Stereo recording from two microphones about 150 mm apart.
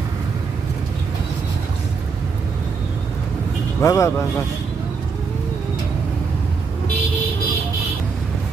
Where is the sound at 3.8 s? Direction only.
20° left (ahead or behind).